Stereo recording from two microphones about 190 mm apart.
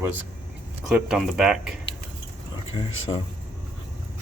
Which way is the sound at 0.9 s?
5° right (ahead or behind).